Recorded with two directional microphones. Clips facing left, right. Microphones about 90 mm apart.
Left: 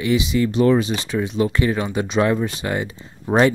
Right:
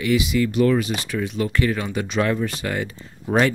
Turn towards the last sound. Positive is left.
turn(degrees=25)  # may be behind; listen again after turning